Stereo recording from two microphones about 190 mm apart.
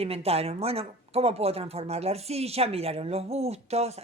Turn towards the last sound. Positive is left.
turn(degrees=-35)  # may be behind; listen again after turning